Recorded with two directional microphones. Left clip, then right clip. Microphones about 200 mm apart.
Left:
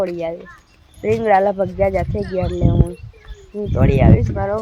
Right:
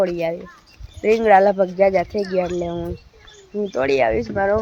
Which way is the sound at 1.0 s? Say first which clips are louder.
Right 1 dB; 5° right (ahead or behind).